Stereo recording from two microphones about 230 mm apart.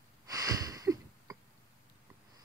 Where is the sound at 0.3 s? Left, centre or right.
Centre.